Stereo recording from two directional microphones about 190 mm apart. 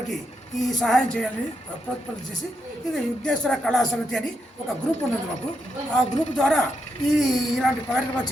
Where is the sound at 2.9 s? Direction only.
Centre (ahead or behind).